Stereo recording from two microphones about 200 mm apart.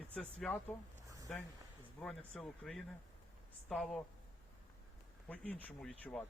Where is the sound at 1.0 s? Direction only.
15° right (ahead or behind).